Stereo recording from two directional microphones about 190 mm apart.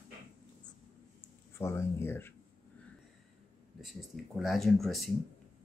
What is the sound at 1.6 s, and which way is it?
Speech, 15° left (ahead or behind).